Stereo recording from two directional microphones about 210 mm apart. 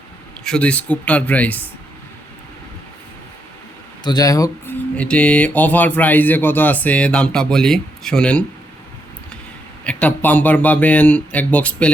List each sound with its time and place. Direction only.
0.4 s speech: 5° left (ahead or behind)
4.0 s speech: 20° left (ahead or behind)
9.8 s speech: 5° left (ahead or behind)